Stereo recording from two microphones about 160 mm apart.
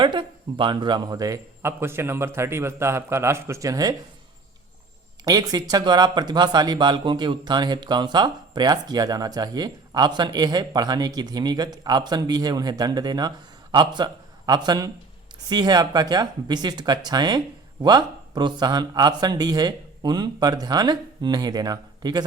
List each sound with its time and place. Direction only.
0.0 s a man's voice: 30° right (ahead or behind)
5.2 s speech: 25° right (ahead or behind)